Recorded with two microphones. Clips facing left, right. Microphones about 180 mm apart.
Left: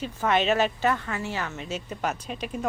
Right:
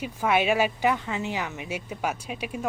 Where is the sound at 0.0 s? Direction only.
10° right (ahead or behind).